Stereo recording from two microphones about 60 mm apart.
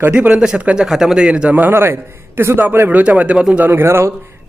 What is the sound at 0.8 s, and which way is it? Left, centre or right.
Speech, centre.